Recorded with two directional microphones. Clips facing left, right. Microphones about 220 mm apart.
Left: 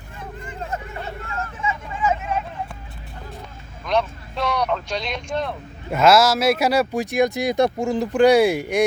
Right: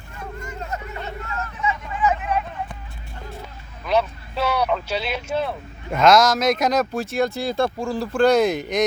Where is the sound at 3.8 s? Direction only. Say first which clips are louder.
Right 1 dB; 5° right (ahead or behind).